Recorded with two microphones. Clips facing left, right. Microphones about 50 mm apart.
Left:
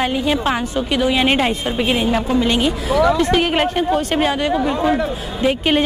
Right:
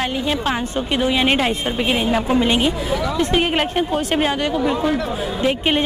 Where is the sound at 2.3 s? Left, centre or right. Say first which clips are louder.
Even; centre.